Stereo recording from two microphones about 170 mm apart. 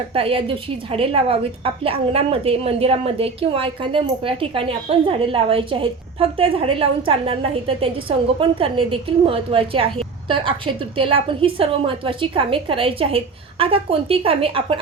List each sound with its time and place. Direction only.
0.1 s a woman's voice: 35° right (ahead or behind)